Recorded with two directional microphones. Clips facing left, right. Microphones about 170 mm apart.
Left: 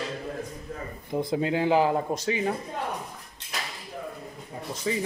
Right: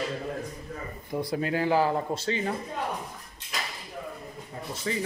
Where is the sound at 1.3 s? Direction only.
20° left (ahead or behind).